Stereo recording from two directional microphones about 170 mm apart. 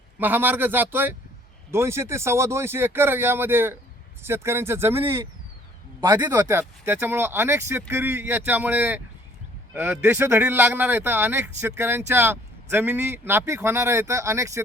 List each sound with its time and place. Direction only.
0.2 s speech: 10° right (ahead or behind)
6.1 s speech: 15° right (ahead or behind)